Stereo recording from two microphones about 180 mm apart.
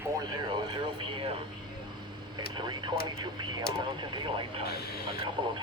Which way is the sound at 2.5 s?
25° right (ahead or behind).